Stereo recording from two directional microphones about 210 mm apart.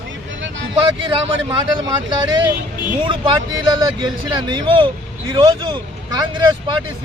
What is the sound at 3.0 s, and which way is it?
Speech, 25° right (ahead or behind).